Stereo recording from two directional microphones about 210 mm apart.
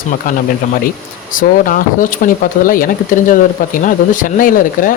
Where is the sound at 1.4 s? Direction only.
40° left (ahead or behind).